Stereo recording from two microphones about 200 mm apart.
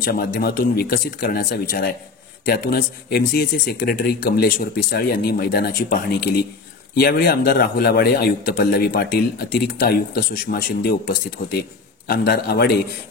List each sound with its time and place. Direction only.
0.0 s a man's voice: 50° left (ahead or behind)